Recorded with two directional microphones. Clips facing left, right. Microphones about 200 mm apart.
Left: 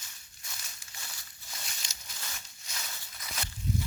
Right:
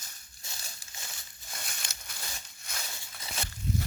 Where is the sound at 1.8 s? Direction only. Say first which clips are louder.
Right 4 dB; 55° right (ahead or behind).